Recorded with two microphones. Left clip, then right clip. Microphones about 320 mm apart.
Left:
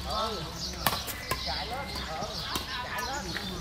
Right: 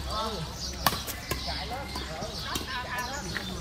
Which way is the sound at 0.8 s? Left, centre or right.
Centre.